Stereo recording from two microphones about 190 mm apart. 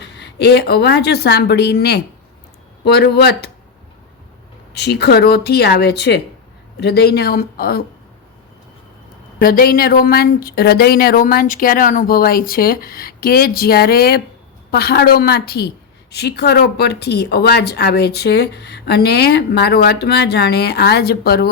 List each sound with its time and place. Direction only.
0.0 s speech: 65° left (ahead or behind)
4.7 s speech: 60° left (ahead or behind)
9.4 s a woman's voice: 50° left (ahead or behind)